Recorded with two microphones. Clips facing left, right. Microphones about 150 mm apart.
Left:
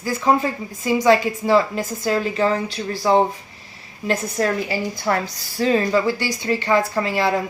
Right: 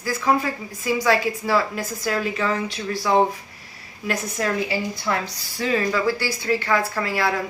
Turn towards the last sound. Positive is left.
turn(degrees=20)  # may be behind; listen again after turning